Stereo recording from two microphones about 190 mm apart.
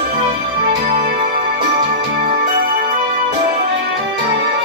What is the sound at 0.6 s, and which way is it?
Music, 50° right (ahead or behind).